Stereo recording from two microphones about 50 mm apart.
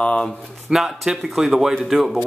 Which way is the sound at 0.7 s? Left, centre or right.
Centre.